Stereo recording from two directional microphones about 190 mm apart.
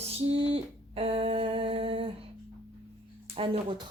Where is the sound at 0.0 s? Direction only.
30° right (ahead or behind).